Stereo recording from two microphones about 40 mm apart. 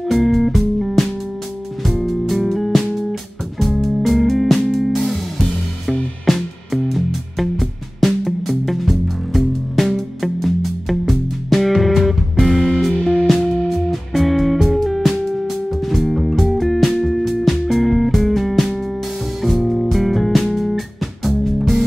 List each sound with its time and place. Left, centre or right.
0.0 s music: centre
6.2 s music: centre
12.9 s music: left
13.7 s music: centre